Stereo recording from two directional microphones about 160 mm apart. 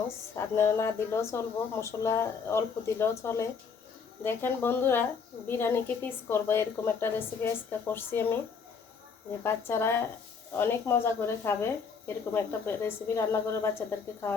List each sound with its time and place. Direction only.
0.3 s speech: 15° left (ahead or behind)
9.4 s speech: 15° left (ahead or behind)